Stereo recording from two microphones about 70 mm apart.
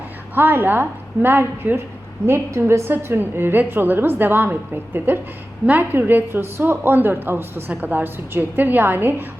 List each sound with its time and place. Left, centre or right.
0.3 s a woman's voice: right